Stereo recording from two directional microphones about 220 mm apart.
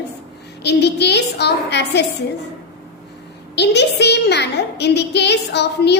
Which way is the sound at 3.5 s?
50° left (ahead or behind).